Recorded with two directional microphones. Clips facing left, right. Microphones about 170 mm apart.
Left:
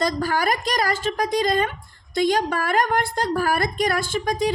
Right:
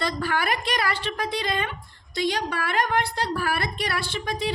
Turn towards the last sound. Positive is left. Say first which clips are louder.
# left 6 dB
turn(degrees=45)  # may be behind; listen again after turning